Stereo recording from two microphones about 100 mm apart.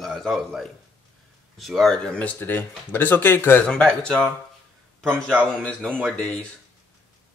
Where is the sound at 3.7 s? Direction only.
10° left (ahead or behind).